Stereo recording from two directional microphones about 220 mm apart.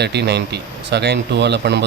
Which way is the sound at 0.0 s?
50° right (ahead or behind).